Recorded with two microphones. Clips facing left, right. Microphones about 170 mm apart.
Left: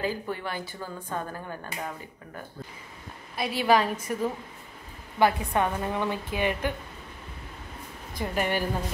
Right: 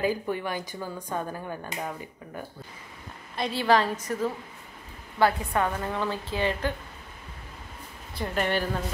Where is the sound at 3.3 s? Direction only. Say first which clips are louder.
Even; 10° left (ahead or behind).